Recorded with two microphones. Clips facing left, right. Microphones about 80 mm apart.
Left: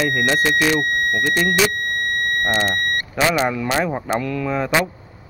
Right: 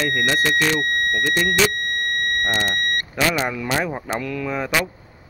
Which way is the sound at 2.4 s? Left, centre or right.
Centre.